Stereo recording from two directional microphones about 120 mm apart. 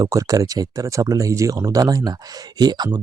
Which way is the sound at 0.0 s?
30° right (ahead or behind).